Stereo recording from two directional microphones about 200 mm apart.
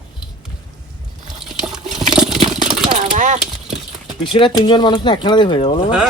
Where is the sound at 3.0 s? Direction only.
40° right (ahead or behind).